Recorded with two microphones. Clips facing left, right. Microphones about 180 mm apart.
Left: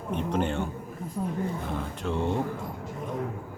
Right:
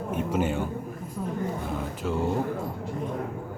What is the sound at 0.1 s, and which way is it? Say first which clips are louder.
Speech: right 1 dB; 5° right (ahead or behind).